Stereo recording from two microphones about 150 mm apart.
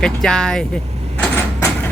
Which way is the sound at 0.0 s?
5° left (ahead or behind).